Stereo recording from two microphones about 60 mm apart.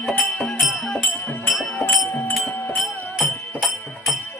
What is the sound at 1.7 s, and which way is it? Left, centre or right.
Music, left.